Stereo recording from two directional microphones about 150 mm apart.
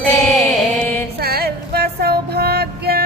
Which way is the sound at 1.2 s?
90° right.